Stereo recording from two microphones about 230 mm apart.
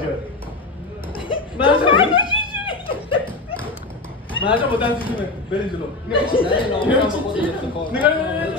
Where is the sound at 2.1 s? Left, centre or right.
Left.